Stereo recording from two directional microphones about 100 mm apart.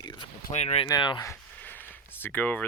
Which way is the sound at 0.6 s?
90° left.